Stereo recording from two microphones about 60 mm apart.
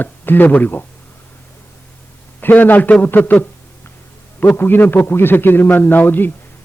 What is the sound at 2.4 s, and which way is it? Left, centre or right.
A man's voice, left.